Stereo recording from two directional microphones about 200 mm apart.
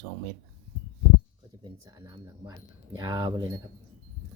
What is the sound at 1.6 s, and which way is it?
Speech, 15° right (ahead or behind).